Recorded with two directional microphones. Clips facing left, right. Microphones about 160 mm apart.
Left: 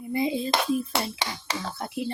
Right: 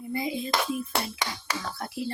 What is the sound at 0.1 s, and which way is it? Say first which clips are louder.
Hands: left 4 dB; 25° left (ahead or behind).